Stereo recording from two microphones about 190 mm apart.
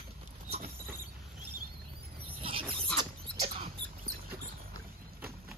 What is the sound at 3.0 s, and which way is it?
Rodents, 25° right (ahead or behind).